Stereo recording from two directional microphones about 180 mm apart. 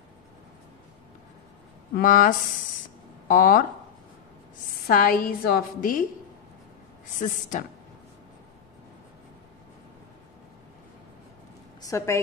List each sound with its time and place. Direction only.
2.0 s a woman's voice: 45° left (ahead or behind)
4.8 s a woman's voice: 55° left (ahead or behind)
7.2 s a woman's voice: 45° left (ahead or behind)
11.8 s a woman's voice: 15° left (ahead or behind)